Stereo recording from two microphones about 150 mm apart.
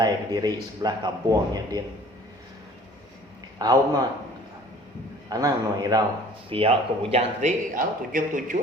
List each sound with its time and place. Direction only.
0.0 s a man's voice: 25° right (ahead or behind)
3.6 s a man's voice: 25° right (ahead or behind)
5.3 s a man's voice: 25° right (ahead or behind)
6.5 s a man's voice: 40° right (ahead or behind); by 8.5 s 60° right (ahead or behind)